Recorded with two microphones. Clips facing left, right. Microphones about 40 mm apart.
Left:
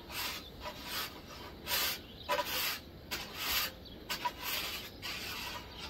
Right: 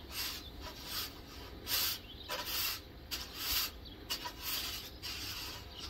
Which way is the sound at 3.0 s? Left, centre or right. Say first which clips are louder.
Left 4 dB; left.